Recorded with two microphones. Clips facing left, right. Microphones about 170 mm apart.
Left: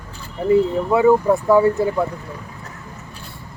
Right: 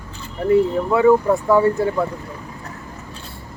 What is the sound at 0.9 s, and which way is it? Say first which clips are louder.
Speech: even; 5° left (ahead or behind).